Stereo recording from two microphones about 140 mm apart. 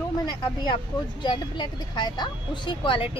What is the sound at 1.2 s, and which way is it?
Speech, 35° left (ahead or behind).